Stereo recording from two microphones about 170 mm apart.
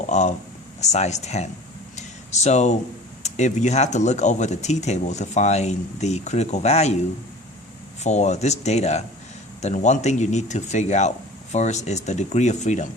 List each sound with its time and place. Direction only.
0.1 s speech: 40° left (ahead or behind)
2.0 s a sound: 40° left (ahead or behind)
3.2 s speech: 40° left (ahead or behind)
8.0 s speech: 40° left (ahead or behind)